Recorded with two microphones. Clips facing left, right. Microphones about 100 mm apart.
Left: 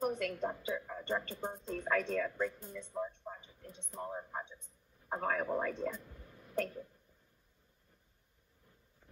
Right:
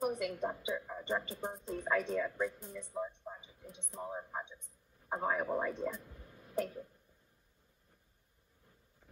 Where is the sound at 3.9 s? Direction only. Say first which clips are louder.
Even; 5° right (ahead or behind).